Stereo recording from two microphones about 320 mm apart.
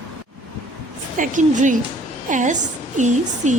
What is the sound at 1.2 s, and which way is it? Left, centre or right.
A woman's voice, right.